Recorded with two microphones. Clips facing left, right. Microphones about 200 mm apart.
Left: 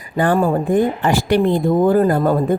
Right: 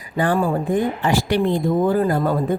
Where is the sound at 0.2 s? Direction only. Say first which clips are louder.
Left 3 dB; 50° left (ahead or behind).